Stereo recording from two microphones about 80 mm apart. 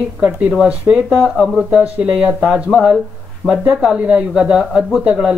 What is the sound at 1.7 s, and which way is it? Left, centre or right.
Speech, centre.